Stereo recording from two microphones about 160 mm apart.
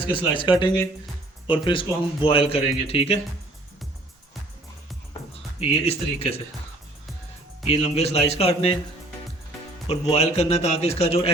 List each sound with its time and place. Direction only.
0.1 s a man's voice: 30° left (ahead or behind)
5.5 s a man's voice: 35° left (ahead or behind)
7.7 s a man's voice: 40° left (ahead or behind)
9.8 s a man's voice: 40° left (ahead or behind)